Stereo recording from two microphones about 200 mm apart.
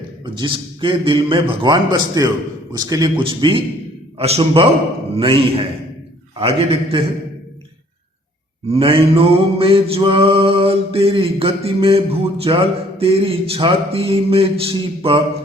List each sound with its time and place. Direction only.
0.3 s mantra: 25° right (ahead or behind)
8.7 s mantra: 30° right (ahead or behind)